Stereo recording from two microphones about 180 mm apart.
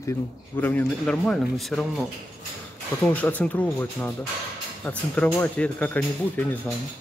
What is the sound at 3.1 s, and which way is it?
Speech, 10° left (ahead or behind).